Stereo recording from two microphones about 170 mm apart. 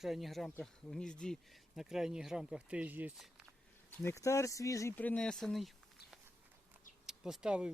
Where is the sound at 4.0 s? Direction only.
15° left (ahead or behind).